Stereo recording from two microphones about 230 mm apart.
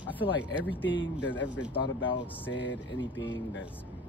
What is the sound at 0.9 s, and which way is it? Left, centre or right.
Speech, left.